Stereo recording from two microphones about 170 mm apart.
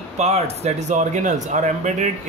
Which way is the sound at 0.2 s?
40° right (ahead or behind).